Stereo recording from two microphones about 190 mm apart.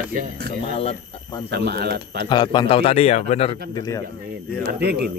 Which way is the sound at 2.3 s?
25° left (ahead or behind).